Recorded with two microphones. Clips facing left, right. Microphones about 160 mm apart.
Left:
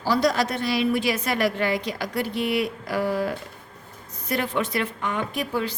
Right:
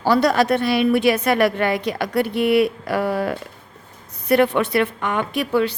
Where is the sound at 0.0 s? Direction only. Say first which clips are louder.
Right 5 dB; 60° right (ahead or behind).